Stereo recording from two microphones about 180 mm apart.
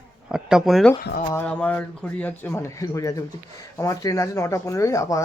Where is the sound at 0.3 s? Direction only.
5° right (ahead or behind).